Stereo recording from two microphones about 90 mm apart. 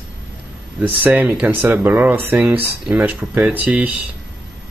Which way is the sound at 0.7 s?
15° right (ahead or behind).